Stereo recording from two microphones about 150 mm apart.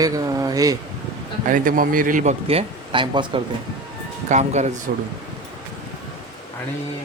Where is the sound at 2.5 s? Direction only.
40° right (ahead or behind).